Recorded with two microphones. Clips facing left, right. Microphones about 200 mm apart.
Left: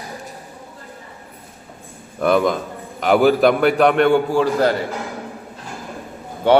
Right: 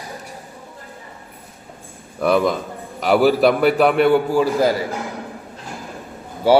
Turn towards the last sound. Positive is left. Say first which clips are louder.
# even
turn(degrees=-5)  # may be behind; listen again after turning